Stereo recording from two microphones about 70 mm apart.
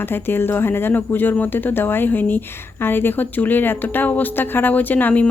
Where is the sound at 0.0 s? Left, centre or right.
Left.